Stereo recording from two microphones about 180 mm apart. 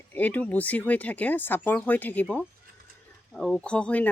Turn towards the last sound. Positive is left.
turn(degrees=5)  # may be behind; listen again after turning